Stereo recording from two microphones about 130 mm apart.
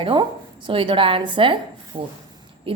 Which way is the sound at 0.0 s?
40° right (ahead or behind).